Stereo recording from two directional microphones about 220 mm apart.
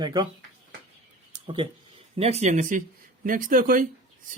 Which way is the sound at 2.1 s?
30° right (ahead or behind).